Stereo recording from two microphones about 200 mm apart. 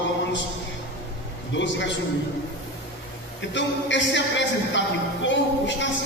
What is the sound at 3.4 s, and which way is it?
A man's voice, 65° left (ahead or behind).